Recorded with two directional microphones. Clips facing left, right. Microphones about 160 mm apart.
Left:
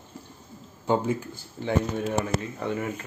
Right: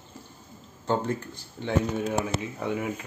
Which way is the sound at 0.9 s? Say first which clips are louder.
Left 2 dB; 5° left (ahead or behind).